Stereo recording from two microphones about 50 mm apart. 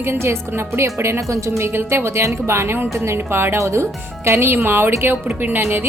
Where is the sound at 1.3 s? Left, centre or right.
Right.